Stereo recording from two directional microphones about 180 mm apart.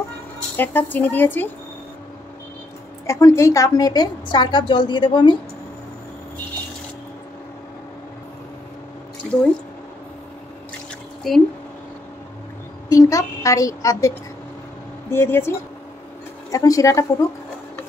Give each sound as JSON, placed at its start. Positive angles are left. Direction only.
{"t": 0.6, "sound": "speech", "side_deg": 10}
{"t": 3.1, "sound": "a woman's voice", "side_deg": 15}
{"t": 9.2, "sound": "drip", "side_deg": 0}
{"t": 11.3, "sound": "speech", "side_deg": 0}
{"t": 12.9, "sound": "speech", "side_deg": 20}
{"t": 16.5, "sound": "speech", "side_deg": 20}